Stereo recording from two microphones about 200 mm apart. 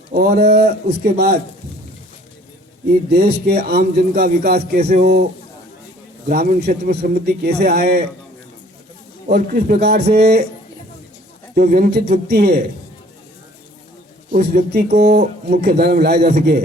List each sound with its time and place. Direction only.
0.1 s a man's voice: 50° right (ahead or behind)
3.1 s a man's voice: 55° right (ahead or behind)
6.2 s a man's voice: 50° right (ahead or behind)
9.3 s a man's voice: 50° right (ahead or behind)
11.5 s a man's voice: 45° right (ahead or behind)
14.3 s a man's voice: 50° right (ahead or behind)